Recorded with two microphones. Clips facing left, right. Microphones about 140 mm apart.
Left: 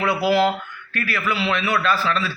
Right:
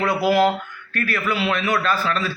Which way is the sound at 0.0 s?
45° right (ahead or behind).